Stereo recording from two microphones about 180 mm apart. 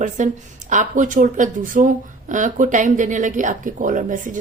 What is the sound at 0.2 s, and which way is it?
Speech, 45° right (ahead or behind).